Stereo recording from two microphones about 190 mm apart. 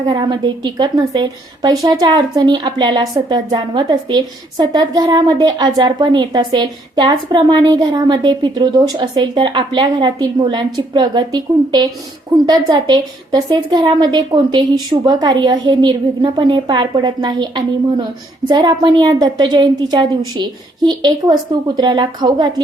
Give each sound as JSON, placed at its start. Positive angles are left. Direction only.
{"t": 0.1, "sound": "a woman's voice", "side_deg": -25}